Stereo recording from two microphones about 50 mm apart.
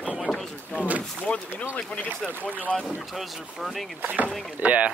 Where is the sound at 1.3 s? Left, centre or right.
Left.